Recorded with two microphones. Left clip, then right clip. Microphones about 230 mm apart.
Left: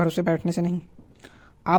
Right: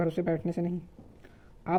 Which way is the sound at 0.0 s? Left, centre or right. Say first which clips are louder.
Left 6 dB; left.